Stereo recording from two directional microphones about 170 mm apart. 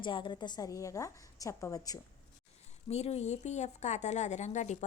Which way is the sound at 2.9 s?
40° left (ahead or behind).